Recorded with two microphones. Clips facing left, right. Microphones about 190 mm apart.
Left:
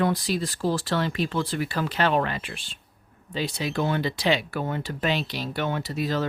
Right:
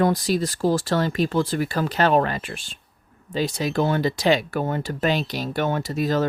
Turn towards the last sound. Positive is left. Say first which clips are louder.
# right 4 dB
turn(degrees=-45)  # may be behind; listen again after turning